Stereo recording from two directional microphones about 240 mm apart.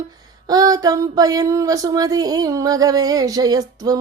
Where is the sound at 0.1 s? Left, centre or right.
Centre.